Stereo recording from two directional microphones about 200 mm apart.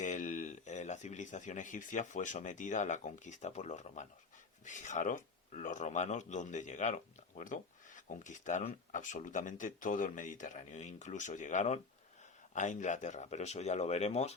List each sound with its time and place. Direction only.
0.0 s speech: 40° left (ahead or behind)